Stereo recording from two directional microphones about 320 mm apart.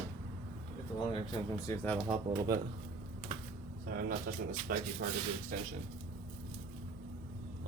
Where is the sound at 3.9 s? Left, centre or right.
Right.